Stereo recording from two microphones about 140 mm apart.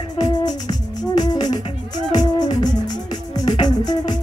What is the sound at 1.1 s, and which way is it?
Music, 30° left (ahead or behind).